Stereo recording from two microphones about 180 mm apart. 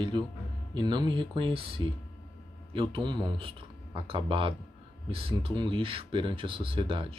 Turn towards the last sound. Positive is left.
turn(degrees=-30)  # may be behind; listen again after turning